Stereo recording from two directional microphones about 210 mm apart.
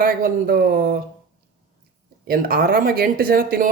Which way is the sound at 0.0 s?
45° right (ahead or behind).